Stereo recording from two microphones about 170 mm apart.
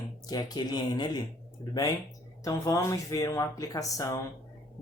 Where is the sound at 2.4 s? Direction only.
20° left (ahead or behind).